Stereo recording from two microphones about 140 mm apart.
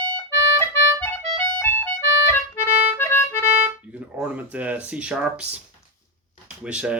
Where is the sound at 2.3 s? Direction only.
15° left (ahead or behind).